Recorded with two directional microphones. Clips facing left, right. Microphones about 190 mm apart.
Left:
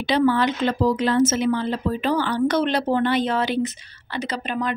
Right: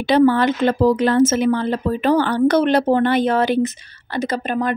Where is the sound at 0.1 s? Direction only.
50° right (ahead or behind).